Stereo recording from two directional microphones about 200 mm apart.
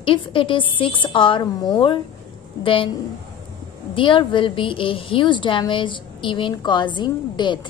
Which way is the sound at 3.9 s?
25° left (ahead or behind).